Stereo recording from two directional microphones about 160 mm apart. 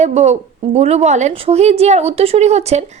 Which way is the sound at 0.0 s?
45° right (ahead or behind).